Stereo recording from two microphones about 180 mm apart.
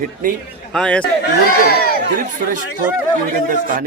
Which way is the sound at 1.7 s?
60° left (ahead or behind).